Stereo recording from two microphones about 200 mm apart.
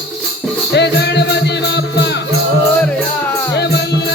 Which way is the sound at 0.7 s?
60° left (ahead or behind).